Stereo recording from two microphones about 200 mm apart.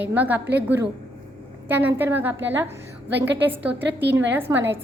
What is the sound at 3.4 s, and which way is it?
A woman's voice, 10° right (ahead or behind).